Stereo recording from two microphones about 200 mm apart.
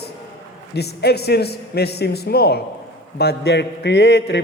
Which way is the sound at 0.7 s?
55° left (ahead or behind).